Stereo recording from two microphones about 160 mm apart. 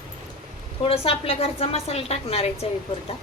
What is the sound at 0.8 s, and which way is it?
A woman's voice, 35° left (ahead or behind).